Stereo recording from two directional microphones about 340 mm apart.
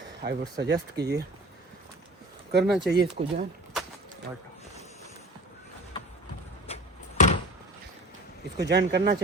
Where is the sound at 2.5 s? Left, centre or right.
Right.